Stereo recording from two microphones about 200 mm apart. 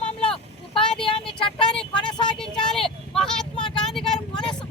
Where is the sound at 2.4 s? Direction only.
Centre (ahead or behind).